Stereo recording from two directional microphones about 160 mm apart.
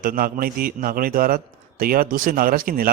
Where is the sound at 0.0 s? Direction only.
65° right (ahead or behind).